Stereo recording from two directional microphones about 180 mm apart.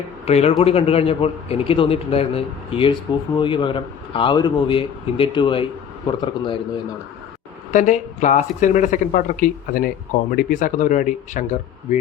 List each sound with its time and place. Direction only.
0.3 s a man's voice: 35° left (ahead or behind)
7.7 s speech: 45° left (ahead or behind)